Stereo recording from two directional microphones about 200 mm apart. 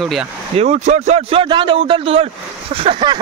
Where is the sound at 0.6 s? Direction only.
35° right (ahead or behind).